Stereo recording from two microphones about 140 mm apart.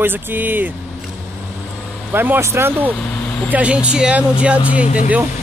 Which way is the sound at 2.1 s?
15° right (ahead or behind).